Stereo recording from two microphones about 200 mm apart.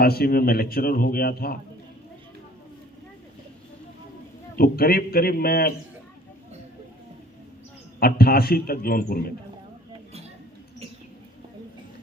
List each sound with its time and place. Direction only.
0.0 s speech: 50° left (ahead or behind)
4.5 s speech: 50° left (ahead or behind)
7.9 s speech: 50° left (ahead or behind)